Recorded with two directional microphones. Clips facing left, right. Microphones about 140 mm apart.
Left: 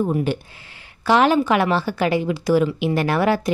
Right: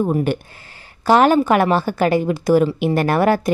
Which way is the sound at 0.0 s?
55° right (ahead or behind).